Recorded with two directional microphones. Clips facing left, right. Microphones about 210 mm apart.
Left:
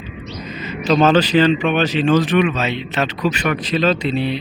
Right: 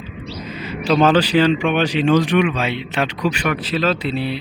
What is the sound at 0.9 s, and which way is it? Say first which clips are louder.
A man's voice: left 1 dB; 10° right (ahead or behind).